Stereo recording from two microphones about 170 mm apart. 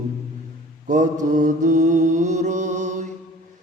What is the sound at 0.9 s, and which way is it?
Mantra, 45° right (ahead or behind).